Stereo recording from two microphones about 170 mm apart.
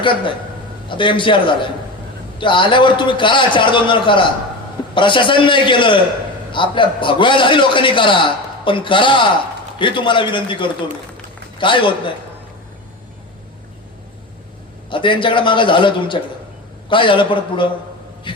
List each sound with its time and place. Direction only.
0.9 s a man's voice: 30° left (ahead or behind)
14.8 s a man's voice: 30° left (ahead or behind)